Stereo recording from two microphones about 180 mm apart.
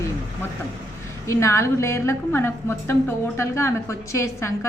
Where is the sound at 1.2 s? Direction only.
15° left (ahead or behind).